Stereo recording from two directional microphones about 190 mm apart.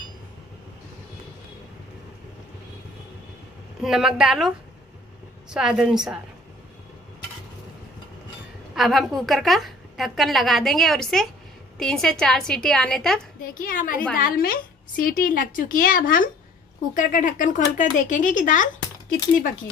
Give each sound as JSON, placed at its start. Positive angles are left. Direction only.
{"t": 3.8, "sound": "a woman's voice", "side_deg": 0}
{"t": 8.7, "sound": "a woman's voice", "side_deg": 0}
{"t": 13.4, "sound": "speech", "side_deg": 50}